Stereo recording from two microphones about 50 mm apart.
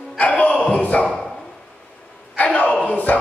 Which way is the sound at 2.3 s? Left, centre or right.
Left.